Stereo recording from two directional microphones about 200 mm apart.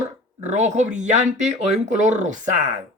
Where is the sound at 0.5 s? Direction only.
35° right (ahead or behind).